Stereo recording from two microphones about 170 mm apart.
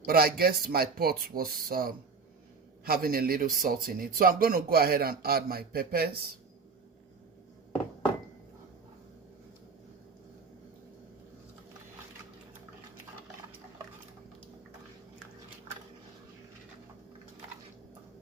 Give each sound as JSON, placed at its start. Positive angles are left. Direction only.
{"t": 0.0, "sound": "a man's voice", "side_deg": -65}